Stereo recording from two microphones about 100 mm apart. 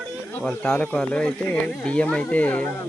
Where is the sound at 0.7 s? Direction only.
15° left (ahead or behind).